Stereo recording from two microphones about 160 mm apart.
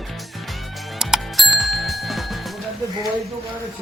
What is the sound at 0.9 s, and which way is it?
Bicycle bell, centre (ahead or behind).